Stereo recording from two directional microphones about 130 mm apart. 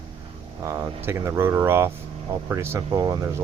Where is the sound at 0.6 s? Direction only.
20° right (ahead or behind).